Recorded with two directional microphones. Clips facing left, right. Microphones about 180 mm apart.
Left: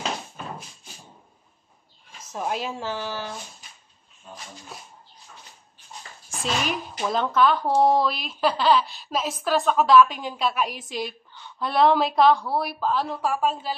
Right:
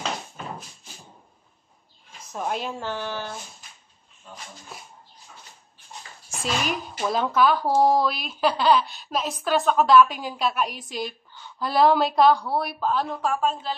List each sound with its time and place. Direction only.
2.3 s speech: centre (ahead or behind)
6.4 s speech: centre (ahead or behind)